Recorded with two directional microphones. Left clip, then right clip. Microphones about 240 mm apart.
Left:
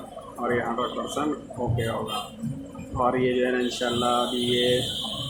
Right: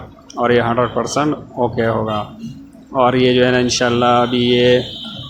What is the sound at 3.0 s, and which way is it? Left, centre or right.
Speech, right.